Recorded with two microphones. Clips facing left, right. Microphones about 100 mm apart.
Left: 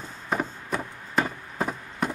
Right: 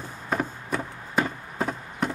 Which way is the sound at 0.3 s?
5° left (ahead or behind).